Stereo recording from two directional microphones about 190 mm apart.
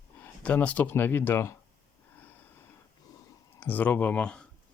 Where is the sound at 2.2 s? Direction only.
10° left (ahead or behind).